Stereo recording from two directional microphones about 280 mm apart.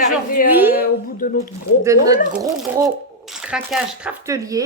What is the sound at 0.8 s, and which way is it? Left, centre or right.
Speech, left.